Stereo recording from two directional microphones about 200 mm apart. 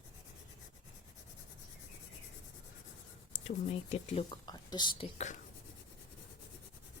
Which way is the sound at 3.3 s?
35° left (ahead or behind).